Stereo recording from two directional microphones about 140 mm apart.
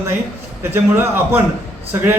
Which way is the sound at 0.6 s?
15° right (ahead or behind).